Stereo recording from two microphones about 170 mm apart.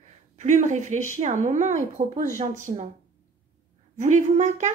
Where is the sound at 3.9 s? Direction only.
45° right (ahead or behind).